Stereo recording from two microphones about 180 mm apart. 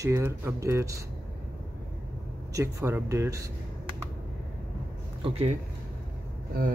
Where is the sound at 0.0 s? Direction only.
15° right (ahead or behind).